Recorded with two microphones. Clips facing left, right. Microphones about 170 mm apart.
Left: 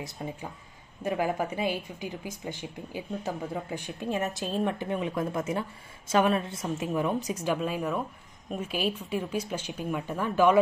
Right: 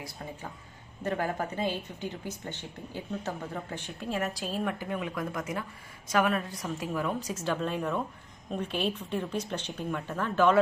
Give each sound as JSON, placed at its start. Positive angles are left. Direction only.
{"t": 1.0, "sound": "speech", "side_deg": 10}